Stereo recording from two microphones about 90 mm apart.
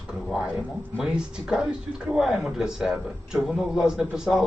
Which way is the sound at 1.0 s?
5° right (ahead or behind).